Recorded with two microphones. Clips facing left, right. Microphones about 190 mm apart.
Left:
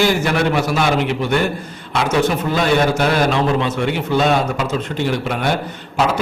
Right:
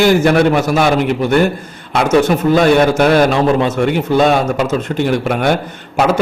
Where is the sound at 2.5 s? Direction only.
50° right (ahead or behind).